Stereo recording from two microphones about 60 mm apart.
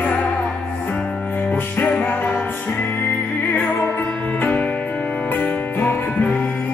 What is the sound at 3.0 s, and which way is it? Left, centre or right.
Music, left.